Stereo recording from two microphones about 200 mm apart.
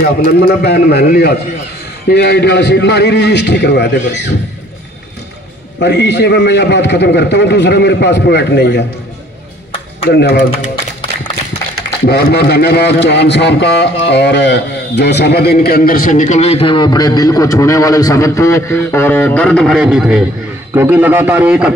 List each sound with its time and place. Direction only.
0.0 s a man's voice: 50° left (ahead or behind)
5.8 s a man's voice: 60° left (ahead or behind)
10.0 s a man's voice: 55° left (ahead or behind)
12.1 s a man's voice: 55° left (ahead or behind); by 21.7 s 5° right (ahead or behind)